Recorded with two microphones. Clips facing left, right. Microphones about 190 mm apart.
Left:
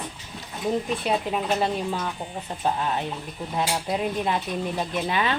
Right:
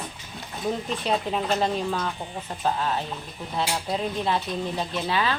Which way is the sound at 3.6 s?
15° left (ahead or behind).